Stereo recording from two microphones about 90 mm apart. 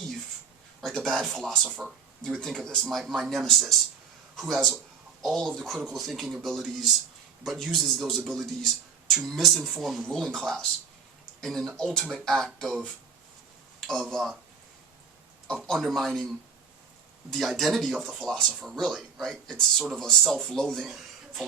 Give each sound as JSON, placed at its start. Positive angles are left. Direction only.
{"t": 0.8, "sound": "speech", "side_deg": 5}
{"t": 14.0, "sound": "speech", "side_deg": 0}
{"t": 15.4, "sound": "speech", "side_deg": 10}
{"t": 17.3, "sound": "speech", "side_deg": 0}